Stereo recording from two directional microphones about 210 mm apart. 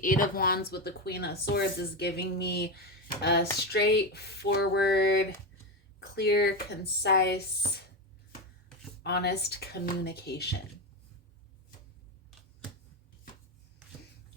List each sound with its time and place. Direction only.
0.0 s speech: 40° left (ahead or behind)
9.0 s speech: 50° left (ahead or behind)